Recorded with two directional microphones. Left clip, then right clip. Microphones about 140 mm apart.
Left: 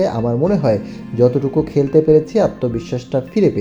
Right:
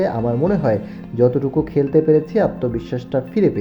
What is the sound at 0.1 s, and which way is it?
Speech, 20° left (ahead or behind).